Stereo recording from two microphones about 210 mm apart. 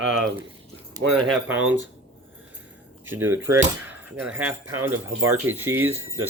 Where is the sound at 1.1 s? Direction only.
Centre (ahead or behind).